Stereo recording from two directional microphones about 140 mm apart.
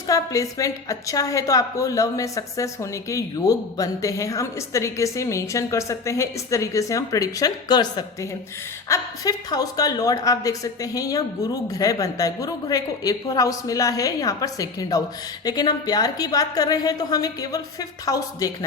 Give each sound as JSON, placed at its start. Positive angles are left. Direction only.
{"t": 0.1, "sound": "a woman's voice", "side_deg": 25}